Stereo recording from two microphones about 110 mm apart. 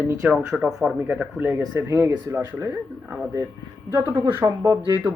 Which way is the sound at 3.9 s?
35° right (ahead or behind).